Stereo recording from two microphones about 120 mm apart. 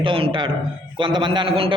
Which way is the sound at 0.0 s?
45° right (ahead or behind).